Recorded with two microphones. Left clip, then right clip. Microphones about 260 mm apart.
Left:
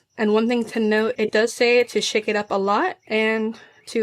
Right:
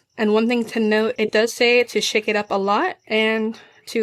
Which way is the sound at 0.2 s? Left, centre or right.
Centre.